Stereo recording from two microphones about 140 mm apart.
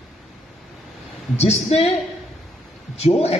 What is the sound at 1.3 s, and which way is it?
Speech, 50° left (ahead or behind).